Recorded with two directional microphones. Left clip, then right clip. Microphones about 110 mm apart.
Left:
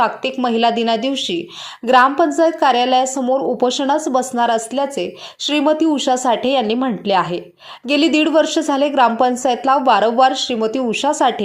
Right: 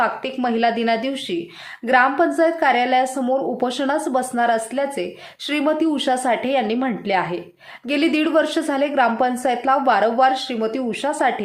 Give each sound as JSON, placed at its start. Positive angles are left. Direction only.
{"t": 0.4, "sound": "a woman's voice", "side_deg": 35}
{"t": 6.2, "sound": "a woman's voice", "side_deg": 40}